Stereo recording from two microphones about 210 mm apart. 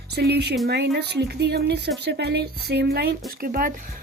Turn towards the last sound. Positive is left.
turn(degrees=-45)  # may be behind; listen again after turning